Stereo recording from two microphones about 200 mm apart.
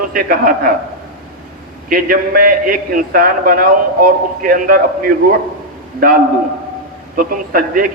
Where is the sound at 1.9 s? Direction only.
45° right (ahead or behind).